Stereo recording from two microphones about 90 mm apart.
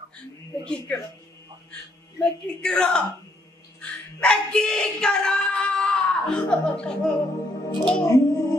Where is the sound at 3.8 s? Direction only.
10° left (ahead or behind).